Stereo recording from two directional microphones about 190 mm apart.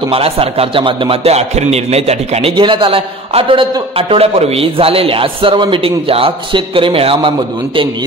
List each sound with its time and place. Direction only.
0.1 s a man's voice: 30° right (ahead or behind)